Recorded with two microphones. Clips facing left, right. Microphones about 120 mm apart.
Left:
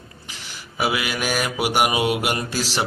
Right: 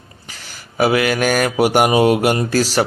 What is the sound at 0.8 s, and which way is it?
Mantra, 45° right (ahead or behind).